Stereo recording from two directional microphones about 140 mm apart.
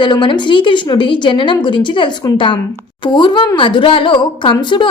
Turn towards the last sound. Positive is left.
turn(degrees=35)  # may be behind; listen again after turning